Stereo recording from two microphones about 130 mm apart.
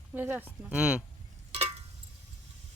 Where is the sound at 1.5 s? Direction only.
50° right (ahead or behind).